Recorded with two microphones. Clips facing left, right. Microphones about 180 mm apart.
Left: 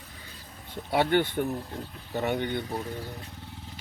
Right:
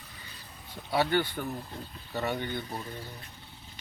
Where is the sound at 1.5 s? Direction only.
65° left (ahead or behind).